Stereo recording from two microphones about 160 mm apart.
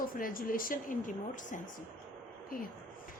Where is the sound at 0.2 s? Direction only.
60° left (ahead or behind).